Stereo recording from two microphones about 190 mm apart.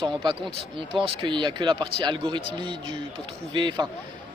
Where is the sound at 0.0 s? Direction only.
25° right (ahead or behind).